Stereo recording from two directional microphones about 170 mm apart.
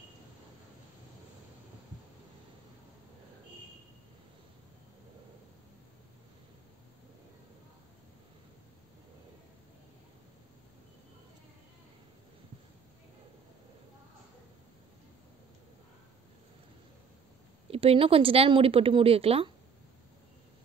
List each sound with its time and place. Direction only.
17.6 s a woman's voice: 35° right (ahead or behind)